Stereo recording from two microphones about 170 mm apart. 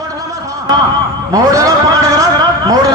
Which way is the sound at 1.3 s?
20° right (ahead or behind).